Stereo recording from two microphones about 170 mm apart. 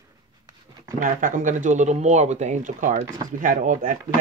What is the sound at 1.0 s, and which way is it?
Speech, 50° right (ahead or behind).